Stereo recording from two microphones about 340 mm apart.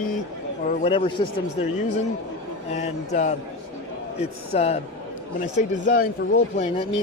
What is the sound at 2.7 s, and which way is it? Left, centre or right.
Speech, centre.